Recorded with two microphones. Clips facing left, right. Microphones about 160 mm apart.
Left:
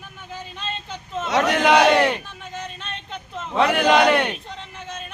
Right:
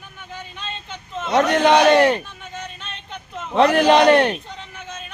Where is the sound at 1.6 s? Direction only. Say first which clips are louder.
Right 2 dB; 30° right (ahead or behind).